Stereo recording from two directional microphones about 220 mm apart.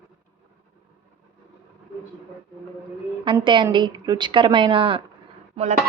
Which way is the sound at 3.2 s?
20° right (ahead or behind).